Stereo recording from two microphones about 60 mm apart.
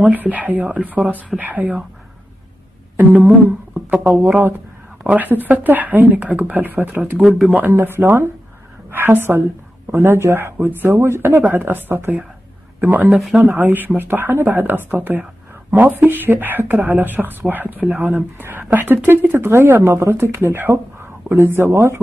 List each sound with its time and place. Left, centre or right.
0.0 s speech: right
3.0 s a sound: right
4.0 s speech: right
7.2 s speech: centre
7.8 s a woman's voice: right